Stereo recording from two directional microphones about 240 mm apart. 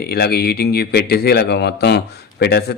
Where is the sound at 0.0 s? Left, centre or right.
Left.